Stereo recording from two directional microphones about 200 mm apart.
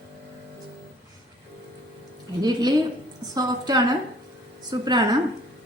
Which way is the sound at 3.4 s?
20° right (ahead or behind).